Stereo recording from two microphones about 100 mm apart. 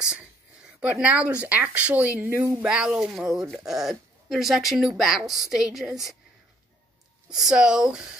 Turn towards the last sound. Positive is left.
turn(degrees=-5)  # may be behind; listen again after turning